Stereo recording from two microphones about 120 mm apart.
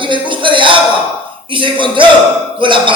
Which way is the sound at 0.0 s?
45° right (ahead or behind).